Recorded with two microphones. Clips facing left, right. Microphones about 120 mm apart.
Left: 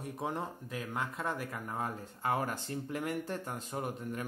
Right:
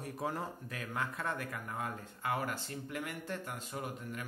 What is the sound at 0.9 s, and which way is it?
Speech, 25° left (ahead or behind).